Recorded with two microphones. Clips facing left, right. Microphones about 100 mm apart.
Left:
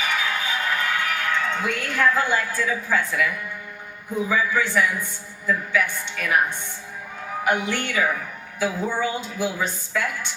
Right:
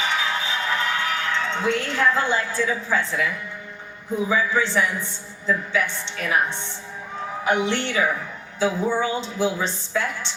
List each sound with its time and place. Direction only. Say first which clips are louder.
0.0 s music: right 1 dB; 25° right (ahead or behind)
4.3 s a woman's voice: right 1 dB; 25° right (ahead or behind)